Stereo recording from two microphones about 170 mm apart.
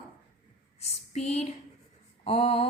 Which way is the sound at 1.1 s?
40° left (ahead or behind).